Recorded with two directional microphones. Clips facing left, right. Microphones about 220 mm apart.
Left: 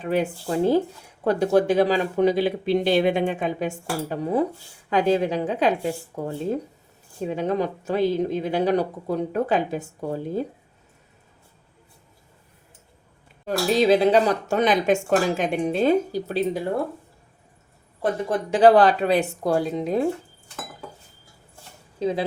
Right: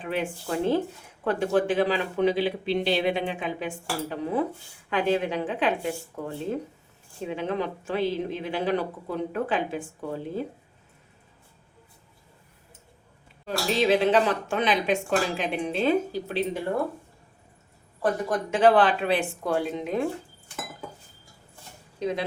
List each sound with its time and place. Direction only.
0.0 s speech: 40° left (ahead or behind)
13.7 s speech: 40° left (ahead or behind)
18.0 s speech: 30° left (ahead or behind)
21.9 s speech: 30° left (ahead or behind)